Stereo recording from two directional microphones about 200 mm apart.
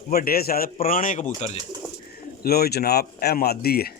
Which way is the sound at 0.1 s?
50° left (ahead or behind).